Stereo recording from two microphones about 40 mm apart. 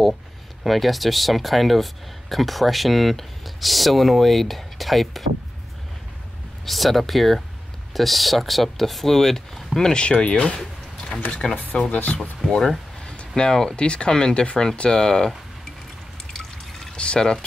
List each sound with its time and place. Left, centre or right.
0.7 s speech: centre
6.6 s speech: centre
9.9 s speech: left
12.4 s speech: centre
16.9 s speech: left